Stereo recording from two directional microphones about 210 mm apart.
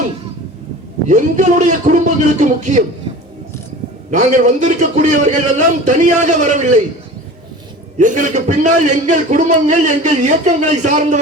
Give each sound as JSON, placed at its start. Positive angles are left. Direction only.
{"t": 1.0, "sound": "a man's voice", "side_deg": -35}
{"t": 4.1, "sound": "a man's voice", "side_deg": -35}
{"t": 7.9, "sound": "a man's voice", "side_deg": -35}